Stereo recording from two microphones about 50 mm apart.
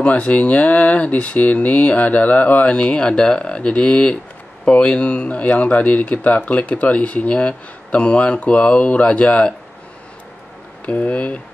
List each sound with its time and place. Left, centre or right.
0.0 s speech: left
10.9 s speech: left